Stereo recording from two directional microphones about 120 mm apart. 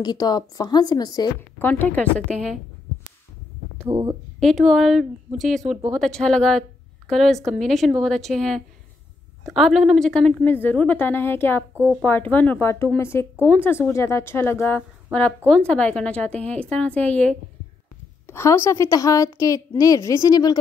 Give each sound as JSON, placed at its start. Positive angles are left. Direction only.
{"t": 0.0, "sound": "a woman's voice", "side_deg": 35}
{"t": 1.6, "sound": "a woman's voice", "side_deg": 15}
{"t": 3.8, "sound": "speech", "side_deg": -35}
{"t": 4.4, "sound": "a woman's voice", "side_deg": 0}
{"t": 11.7, "sound": "speech", "side_deg": -15}
{"t": 12.0, "sound": "a woman's voice", "side_deg": 15}